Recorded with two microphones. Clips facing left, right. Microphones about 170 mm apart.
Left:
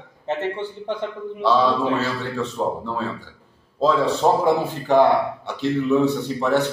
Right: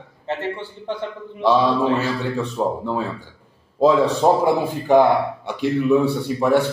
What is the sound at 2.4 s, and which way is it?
Speech, 15° right (ahead or behind).